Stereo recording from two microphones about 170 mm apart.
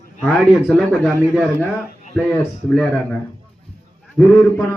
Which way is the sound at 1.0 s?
5° right (ahead or behind).